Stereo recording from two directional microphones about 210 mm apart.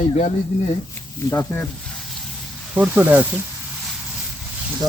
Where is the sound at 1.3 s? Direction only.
10° left (ahead or behind).